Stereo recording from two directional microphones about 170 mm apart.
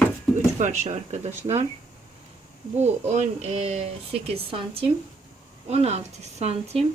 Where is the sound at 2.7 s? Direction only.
40° right (ahead or behind).